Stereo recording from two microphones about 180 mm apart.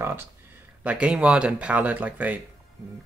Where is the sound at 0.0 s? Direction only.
15° right (ahead or behind).